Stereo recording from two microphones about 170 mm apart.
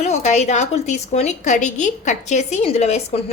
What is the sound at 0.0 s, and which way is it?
A woman's voice, 40° left (ahead or behind).